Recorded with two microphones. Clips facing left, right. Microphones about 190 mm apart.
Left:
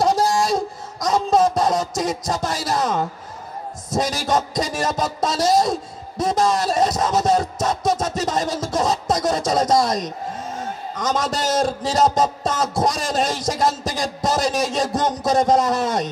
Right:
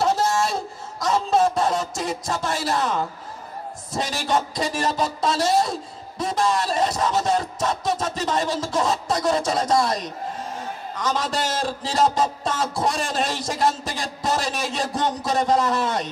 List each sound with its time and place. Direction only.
0.0 s music: 35° left (ahead or behind)
3.9 s speech: 40° left (ahead or behind)